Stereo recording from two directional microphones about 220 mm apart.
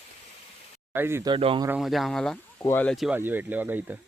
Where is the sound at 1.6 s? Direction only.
5° right (ahead or behind).